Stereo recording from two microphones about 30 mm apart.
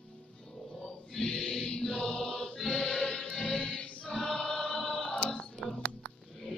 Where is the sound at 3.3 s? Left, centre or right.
Left.